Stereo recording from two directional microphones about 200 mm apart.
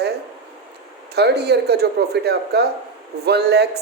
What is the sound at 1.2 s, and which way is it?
Speech, 55° right (ahead or behind).